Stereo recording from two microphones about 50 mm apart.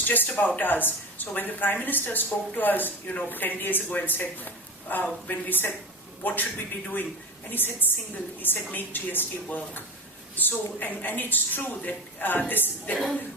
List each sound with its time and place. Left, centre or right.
0.0 s speech: left
7.5 s speech: left